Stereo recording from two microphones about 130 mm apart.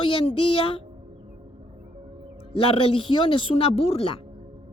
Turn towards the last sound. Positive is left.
turn(degrees=45)  # may be behind; listen again after turning